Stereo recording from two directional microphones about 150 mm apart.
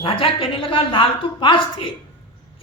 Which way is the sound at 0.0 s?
35° left (ahead or behind).